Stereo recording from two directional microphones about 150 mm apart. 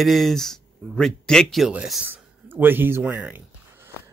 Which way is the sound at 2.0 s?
15° right (ahead or behind).